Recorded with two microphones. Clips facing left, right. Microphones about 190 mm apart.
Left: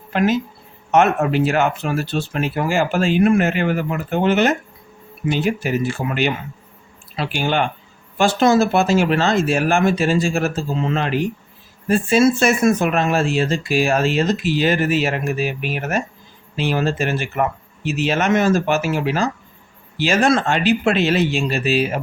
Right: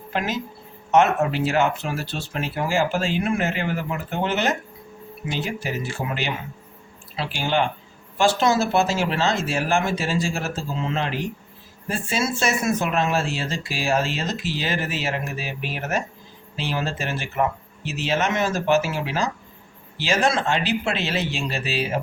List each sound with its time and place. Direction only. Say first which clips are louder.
0.1 s speech: left 8 dB; 55° left (ahead or behind)
7.2 s speech: left 3 dB; 55° left (ahead or behind)